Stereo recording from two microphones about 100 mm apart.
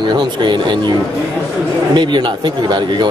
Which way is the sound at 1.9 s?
50° right (ahead or behind).